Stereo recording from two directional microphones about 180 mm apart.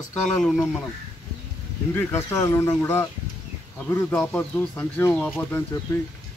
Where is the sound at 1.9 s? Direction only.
15° left (ahead or behind).